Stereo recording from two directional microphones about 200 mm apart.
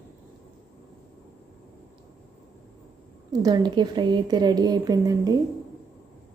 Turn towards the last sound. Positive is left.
turn(degrees=-20)  # may be behind; listen again after turning